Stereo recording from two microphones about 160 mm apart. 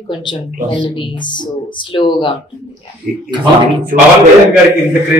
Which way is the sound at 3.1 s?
5° right (ahead or behind).